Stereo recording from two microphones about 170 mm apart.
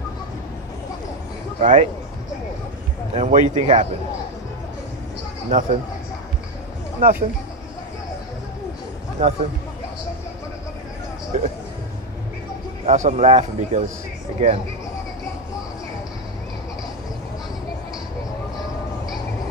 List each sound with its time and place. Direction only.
1.6 s a man's voice: 50° right (ahead or behind)
3.2 s a man's voice: 50° right (ahead or behind)
5.5 s a man's voice: 50° right (ahead or behind)
7.0 s speech: 55° right (ahead or behind)
9.2 s a man's voice: 50° right (ahead or behind)
12.8 s a man's voice: 45° right (ahead or behind)